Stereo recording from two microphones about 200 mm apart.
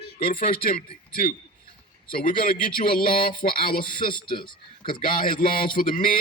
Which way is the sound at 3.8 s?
25° left (ahead or behind).